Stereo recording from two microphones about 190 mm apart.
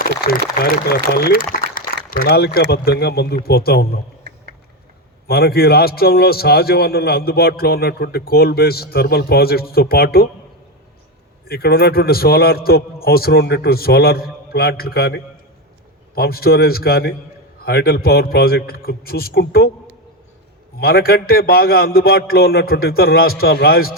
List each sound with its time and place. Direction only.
0.3 s a man's voice: 50° left (ahead or behind)
5.3 s a man's voice: 55° left (ahead or behind)
11.4 s a man's voice: 55° left (ahead or behind)
20.7 s a man's voice: 55° left (ahead or behind)